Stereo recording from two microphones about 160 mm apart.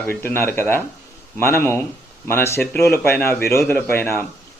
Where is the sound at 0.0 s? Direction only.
15° left (ahead or behind).